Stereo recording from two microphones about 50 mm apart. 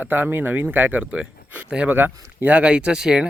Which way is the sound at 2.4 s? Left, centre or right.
Right.